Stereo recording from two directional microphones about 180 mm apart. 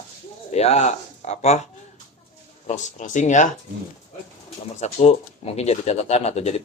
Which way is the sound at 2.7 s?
45° left (ahead or behind).